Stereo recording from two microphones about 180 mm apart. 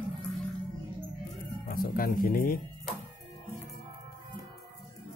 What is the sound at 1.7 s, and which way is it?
Speech, 55° left (ahead or behind).